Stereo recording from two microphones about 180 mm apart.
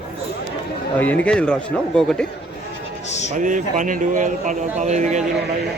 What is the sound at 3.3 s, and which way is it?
Speech, 45° right (ahead or behind).